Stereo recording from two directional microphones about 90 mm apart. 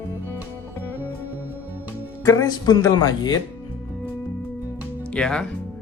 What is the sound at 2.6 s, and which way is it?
Speech, 50° left (ahead or behind).